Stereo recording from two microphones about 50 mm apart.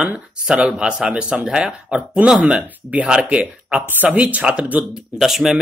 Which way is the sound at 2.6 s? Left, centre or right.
Right.